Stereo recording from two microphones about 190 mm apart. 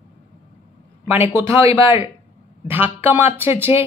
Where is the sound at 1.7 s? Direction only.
25° left (ahead or behind).